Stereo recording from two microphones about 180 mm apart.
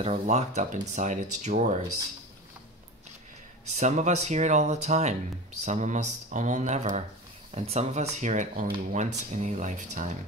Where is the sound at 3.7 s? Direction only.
40° right (ahead or behind).